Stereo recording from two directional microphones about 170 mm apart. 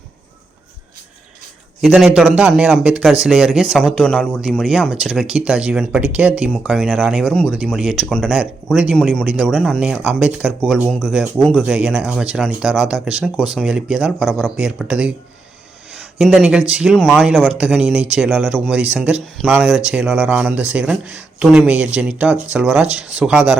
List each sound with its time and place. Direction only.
1.8 s speech: centre (ahead or behind)
16.1 s speech: centre (ahead or behind)
17.2 s speech: 10° right (ahead or behind)